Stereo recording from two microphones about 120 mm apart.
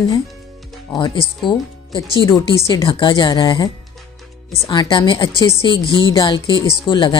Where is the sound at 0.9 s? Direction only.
40° left (ahead or behind).